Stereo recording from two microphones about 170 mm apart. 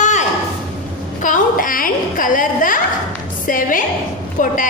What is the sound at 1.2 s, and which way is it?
A woman's voice, 50° left (ahead or behind).